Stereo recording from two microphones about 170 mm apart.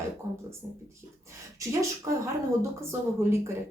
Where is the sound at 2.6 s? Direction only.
15° right (ahead or behind).